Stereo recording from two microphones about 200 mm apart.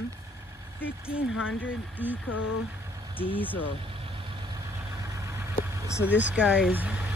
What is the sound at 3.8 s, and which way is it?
Vehicle, 25° right (ahead or behind).